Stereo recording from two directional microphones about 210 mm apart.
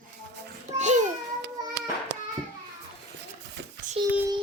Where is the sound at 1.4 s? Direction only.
55° right (ahead or behind).